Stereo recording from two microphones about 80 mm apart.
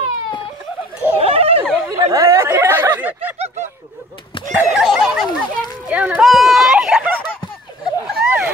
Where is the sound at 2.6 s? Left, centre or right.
Right.